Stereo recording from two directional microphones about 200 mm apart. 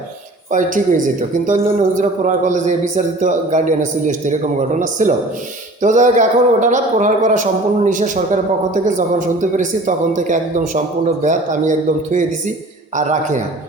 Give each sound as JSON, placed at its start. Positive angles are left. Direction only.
{"t": 0.5, "sound": "a man's voice", "side_deg": -40}